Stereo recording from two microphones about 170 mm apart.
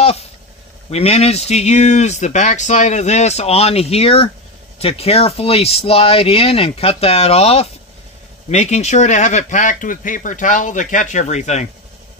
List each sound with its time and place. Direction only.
0.8 s speech: 40° left (ahead or behind)